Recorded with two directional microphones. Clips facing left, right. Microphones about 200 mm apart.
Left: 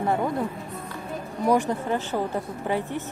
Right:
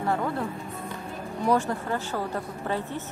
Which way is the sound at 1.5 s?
15° left (ahead or behind).